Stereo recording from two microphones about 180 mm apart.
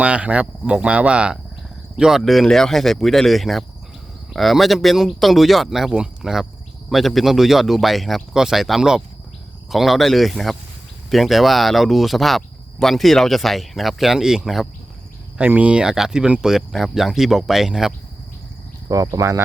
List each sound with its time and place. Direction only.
0.0 s speech: 5° right (ahead or behind)
18.9 s speech: 20° right (ahead or behind)